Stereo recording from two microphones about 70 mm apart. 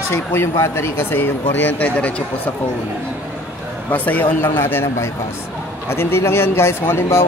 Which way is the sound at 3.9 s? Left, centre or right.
Left.